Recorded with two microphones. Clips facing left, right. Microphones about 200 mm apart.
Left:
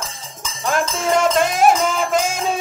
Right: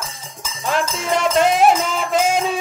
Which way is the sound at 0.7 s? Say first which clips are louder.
Left 2 dB; 45° left (ahead or behind).